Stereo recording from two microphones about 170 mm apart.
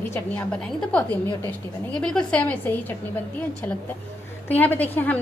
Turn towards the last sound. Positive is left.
turn(degrees=10)  # may be behind; listen again after turning